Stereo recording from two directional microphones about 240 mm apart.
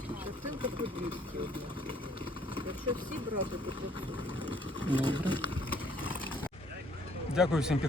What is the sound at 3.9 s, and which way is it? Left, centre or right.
Speech, centre.